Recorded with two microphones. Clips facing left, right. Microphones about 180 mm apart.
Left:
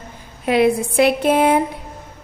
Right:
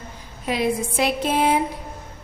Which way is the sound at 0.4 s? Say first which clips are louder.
Left 7 dB; 65° left (ahead or behind).